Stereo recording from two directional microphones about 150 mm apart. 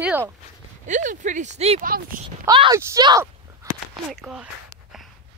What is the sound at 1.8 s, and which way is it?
Speech, 75° right (ahead or behind).